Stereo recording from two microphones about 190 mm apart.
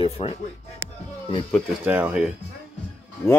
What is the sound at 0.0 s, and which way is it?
Speech, 30° left (ahead or behind).